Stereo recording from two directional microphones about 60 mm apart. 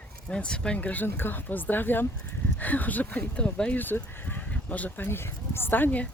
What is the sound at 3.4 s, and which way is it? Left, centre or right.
Speech, centre.